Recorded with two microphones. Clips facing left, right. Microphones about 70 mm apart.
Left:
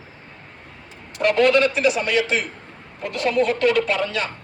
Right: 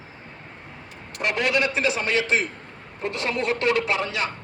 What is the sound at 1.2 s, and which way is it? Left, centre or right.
A man's voice, centre.